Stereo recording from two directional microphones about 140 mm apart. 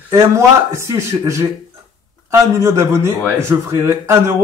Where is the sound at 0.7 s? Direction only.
20° right (ahead or behind).